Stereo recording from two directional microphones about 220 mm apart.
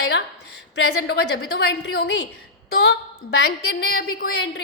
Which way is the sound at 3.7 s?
55° left (ahead or behind).